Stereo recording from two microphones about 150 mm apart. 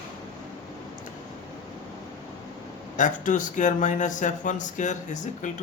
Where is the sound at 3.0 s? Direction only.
60° left (ahead or behind).